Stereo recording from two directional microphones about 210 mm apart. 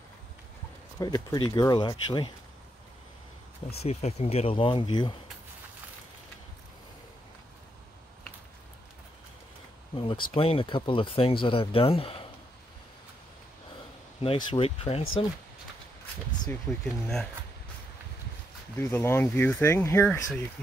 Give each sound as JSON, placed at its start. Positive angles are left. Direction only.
{"t": 0.9, "sound": "speech", "side_deg": 20}
{"t": 3.8, "sound": "speech", "side_deg": 30}
{"t": 9.9, "sound": "speech", "side_deg": 25}
{"t": 14.2, "sound": "speech", "side_deg": 25}
{"t": 16.8, "sound": "speech", "side_deg": 0}
{"t": 18.8, "sound": "speech", "side_deg": 10}